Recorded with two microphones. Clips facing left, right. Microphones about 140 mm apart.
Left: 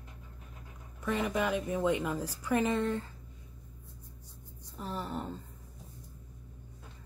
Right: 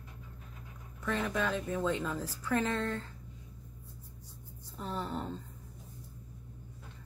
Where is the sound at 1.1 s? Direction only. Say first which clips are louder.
Left 2 dB; 15° left (ahead or behind).